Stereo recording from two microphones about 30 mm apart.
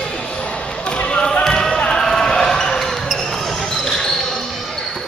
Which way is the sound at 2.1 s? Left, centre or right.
Centre.